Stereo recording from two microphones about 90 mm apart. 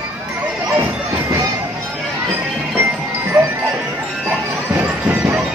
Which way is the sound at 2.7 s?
20° right (ahead or behind).